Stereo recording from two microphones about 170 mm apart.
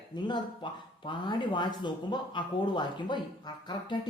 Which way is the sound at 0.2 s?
30° left (ahead or behind).